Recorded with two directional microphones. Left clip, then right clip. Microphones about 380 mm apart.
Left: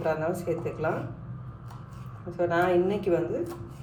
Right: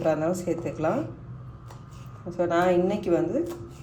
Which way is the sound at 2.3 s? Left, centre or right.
Right.